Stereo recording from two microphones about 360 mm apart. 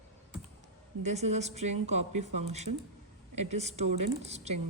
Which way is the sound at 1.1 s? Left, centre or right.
Centre.